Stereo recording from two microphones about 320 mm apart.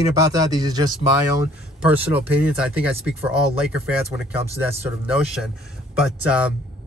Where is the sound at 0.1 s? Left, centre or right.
Centre.